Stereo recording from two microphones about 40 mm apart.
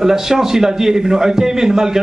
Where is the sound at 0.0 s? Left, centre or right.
Centre.